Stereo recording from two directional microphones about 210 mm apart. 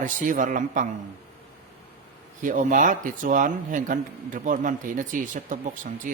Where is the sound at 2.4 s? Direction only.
40° right (ahead or behind).